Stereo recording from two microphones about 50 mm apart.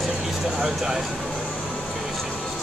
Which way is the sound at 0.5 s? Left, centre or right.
Centre.